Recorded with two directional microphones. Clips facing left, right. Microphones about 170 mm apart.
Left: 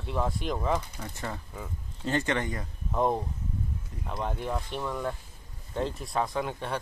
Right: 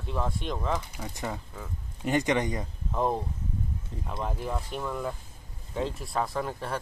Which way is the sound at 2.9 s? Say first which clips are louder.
Left 1 dB; centre (ahead or behind).